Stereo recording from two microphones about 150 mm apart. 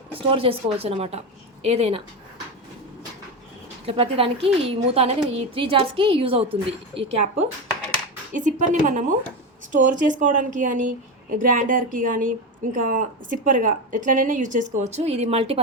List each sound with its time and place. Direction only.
0.3 s a woman's voice: 40° right (ahead or behind)
3.8 s a woman's voice: 40° right (ahead or behind)
8.3 s speech: 55° right (ahead or behind); by 15.6 s 40° right (ahead or behind)